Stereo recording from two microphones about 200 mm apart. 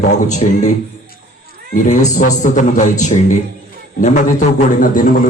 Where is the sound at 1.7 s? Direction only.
40° left (ahead or behind).